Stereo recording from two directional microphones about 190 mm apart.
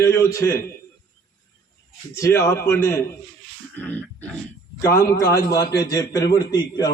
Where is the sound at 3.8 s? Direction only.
10° left (ahead or behind).